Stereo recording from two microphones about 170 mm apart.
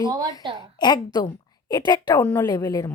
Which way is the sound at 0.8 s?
25° left (ahead or behind).